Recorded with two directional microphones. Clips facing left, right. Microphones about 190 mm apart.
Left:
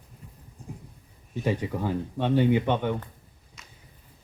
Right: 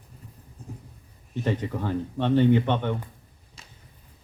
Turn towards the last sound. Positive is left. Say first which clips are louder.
# right 1 dB
turn(degrees=-30)  # may be behind; listen again after turning